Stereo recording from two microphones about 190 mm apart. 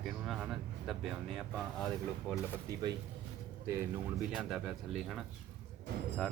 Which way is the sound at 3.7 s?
15° right (ahead or behind).